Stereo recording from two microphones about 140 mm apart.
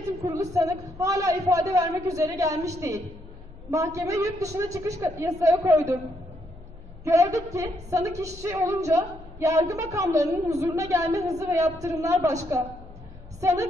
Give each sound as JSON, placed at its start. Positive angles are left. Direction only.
{"t": 0.2, "sound": "speech", "side_deg": -25}
{"t": 7.1, "sound": "speech", "side_deg": -20}
{"t": 13.4, "sound": "a woman's voice", "side_deg": -20}